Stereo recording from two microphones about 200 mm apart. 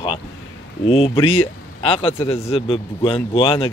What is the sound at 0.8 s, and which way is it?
Speech, 30° left (ahead or behind).